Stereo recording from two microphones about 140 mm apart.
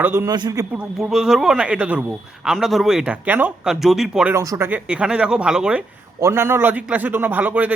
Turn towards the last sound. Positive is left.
turn(degrees=-10)  # may be behind; listen again after turning